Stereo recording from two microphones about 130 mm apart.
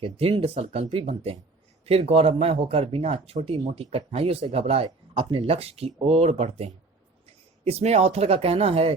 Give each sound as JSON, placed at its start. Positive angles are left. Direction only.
{"t": 0.0, "sound": "speech", "side_deg": -45}